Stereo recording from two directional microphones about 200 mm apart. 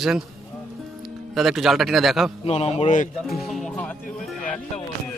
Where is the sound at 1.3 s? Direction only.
Centre (ahead or behind).